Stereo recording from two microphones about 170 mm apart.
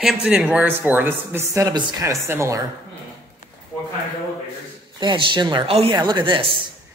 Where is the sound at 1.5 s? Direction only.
20° right (ahead or behind).